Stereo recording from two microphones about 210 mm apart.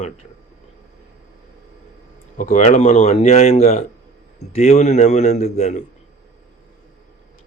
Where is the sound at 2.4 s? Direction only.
35° left (ahead or behind).